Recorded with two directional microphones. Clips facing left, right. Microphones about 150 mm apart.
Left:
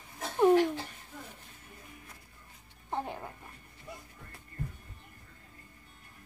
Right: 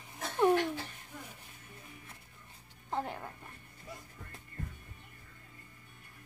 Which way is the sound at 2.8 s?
15° left (ahead or behind).